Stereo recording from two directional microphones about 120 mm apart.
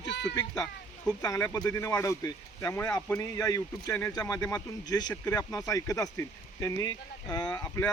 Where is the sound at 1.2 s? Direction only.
30° left (ahead or behind).